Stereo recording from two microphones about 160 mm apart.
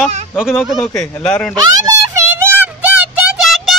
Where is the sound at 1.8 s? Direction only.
20° right (ahead or behind).